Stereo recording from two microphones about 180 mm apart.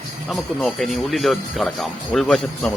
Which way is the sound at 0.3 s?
Centre (ahead or behind).